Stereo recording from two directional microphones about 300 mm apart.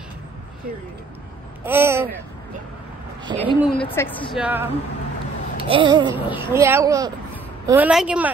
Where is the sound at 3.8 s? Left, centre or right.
Centre.